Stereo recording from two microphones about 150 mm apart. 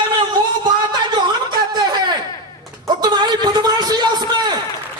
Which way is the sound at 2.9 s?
30° right (ahead or behind).